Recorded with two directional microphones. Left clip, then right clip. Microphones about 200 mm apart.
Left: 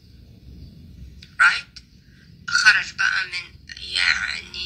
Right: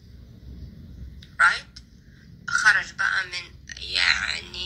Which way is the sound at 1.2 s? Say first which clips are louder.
Left 3 dB; 25° right (ahead or behind).